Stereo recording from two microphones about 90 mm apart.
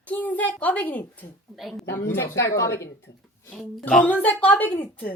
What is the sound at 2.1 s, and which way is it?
Speech, 30° left (ahead or behind).